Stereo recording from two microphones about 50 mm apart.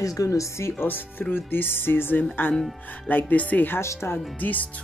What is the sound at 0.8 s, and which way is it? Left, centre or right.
Speech, left.